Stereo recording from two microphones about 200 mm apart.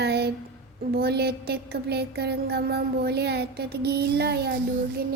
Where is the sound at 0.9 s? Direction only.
55° right (ahead or behind).